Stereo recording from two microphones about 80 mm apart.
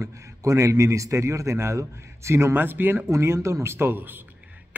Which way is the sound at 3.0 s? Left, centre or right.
Right.